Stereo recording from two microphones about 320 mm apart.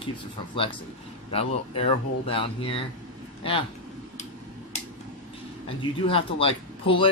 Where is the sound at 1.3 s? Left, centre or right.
Centre.